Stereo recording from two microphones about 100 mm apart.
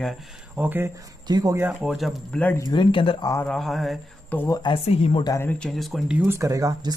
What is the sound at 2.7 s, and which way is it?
Speech, 55° left (ahead or behind).